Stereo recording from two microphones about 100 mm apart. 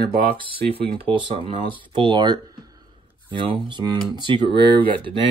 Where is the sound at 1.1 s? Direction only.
65° right (ahead or behind); by 2.7 s 40° right (ahead or behind).